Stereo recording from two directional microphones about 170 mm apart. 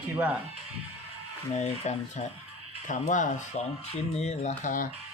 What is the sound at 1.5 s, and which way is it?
Speech, 40° left (ahead or behind).